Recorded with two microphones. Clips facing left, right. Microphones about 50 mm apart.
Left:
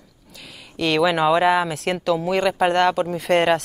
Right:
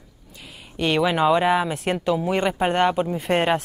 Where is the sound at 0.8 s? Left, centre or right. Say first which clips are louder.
Left 1 dB; left.